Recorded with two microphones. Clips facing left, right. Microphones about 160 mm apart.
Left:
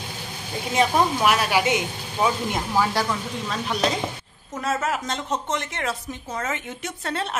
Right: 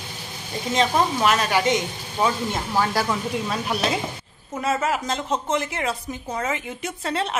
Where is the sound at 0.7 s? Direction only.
10° left (ahead or behind).